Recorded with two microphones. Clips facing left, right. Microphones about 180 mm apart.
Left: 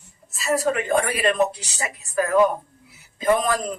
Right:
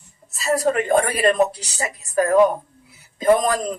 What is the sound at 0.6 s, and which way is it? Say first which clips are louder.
A man's voice: right 5 dB; 40° right (ahead or behind).